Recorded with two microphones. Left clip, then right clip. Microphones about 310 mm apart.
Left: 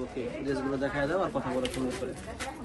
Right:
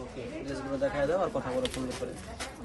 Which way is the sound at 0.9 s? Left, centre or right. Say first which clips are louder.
Right 1 dB; right.